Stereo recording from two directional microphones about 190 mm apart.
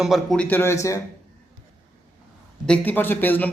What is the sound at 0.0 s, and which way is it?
Speech, centre (ahead or behind).